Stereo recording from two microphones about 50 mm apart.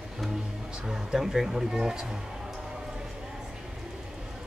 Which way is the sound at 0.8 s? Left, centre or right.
Centre.